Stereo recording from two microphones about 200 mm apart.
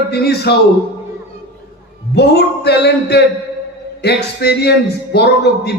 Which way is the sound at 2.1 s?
55° left (ahead or behind).